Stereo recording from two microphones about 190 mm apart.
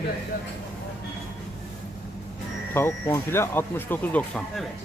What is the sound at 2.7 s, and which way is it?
Speech, 15° left (ahead or behind).